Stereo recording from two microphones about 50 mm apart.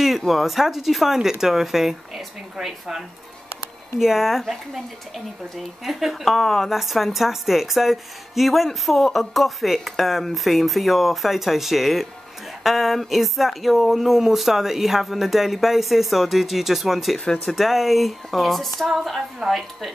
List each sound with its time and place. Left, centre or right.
0.3 s a woman's voice: centre
4.0 s a woman's voice: centre